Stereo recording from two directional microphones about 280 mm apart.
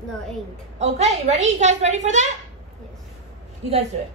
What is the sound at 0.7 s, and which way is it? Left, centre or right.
A woman's voice, right.